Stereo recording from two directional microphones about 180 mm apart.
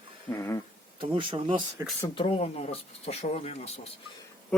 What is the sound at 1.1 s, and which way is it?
Speech, 30° right (ahead or behind).